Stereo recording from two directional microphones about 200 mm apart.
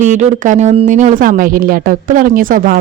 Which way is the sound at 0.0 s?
40° right (ahead or behind).